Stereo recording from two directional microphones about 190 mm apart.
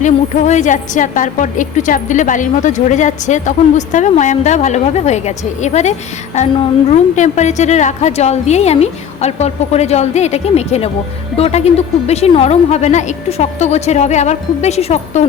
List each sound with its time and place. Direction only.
0.0 s a woman's voice: 40° left (ahead or behind)
6.9 s a woman's voice: 40° left (ahead or behind)